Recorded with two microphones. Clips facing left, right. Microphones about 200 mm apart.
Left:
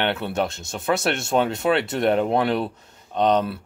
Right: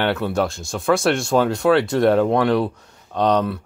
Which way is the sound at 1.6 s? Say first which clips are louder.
Right 5 dB; 5° left (ahead or behind).